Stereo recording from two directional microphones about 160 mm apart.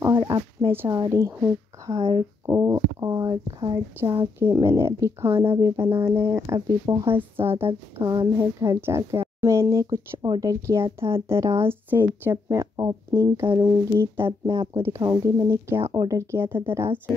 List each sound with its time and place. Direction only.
0.0 s speech: 20° right (ahead or behind)
2.0 s speech: 40° right (ahead or behind)
2.4 s speech: 15° right (ahead or behind)